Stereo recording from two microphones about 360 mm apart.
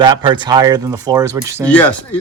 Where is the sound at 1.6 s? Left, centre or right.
Centre.